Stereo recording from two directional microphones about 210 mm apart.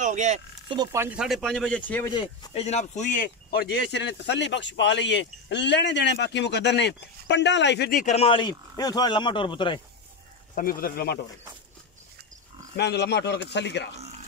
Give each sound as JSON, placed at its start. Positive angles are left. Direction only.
{"t": 0.0, "sound": "a sound", "side_deg": -35}
{"t": 0.7, "sound": "speech", "side_deg": -10}
{"t": 2.0, "sound": "speech", "side_deg": 20}
{"t": 2.5, "sound": "speech", "side_deg": 30}
{"t": 10.5, "sound": "speech", "side_deg": 45}
{"t": 12.7, "sound": "speech", "side_deg": 50}